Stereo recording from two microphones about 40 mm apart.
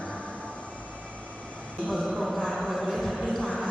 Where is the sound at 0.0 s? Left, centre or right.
Left.